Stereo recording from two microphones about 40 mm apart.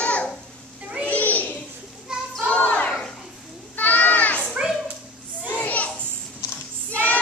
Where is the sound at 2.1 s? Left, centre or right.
Centre.